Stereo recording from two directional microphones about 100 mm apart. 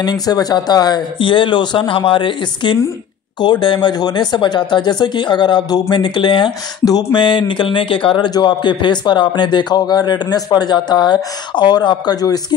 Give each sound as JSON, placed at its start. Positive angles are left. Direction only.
{"t": 0.0, "sound": "speech", "side_deg": 40}